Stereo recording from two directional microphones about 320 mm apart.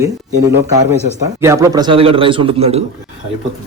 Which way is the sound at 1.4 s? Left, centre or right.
Centre.